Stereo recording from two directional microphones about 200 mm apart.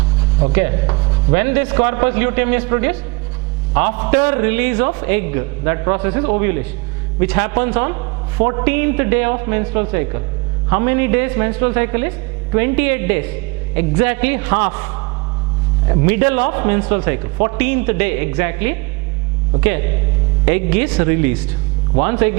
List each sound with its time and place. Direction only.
0.5 s chopping: 15° right (ahead or behind)
1.4 s a man's voice: 10° right (ahead or behind)